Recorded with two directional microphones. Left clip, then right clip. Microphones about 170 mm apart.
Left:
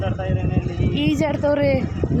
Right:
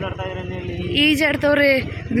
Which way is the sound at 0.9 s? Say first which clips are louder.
Right 5 dB; 10° left (ahead or behind).